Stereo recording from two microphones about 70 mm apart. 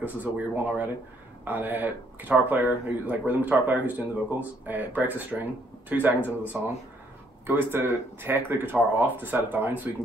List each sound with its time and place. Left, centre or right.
0.0 s speech: right